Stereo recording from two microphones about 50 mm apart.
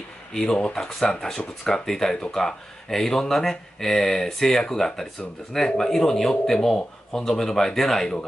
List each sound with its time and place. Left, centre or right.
0.3 s speech: centre